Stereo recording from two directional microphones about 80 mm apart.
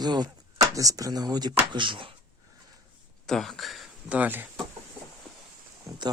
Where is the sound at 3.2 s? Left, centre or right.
Centre.